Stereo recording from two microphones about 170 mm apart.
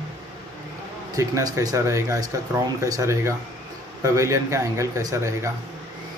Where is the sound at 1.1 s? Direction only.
20° right (ahead or behind).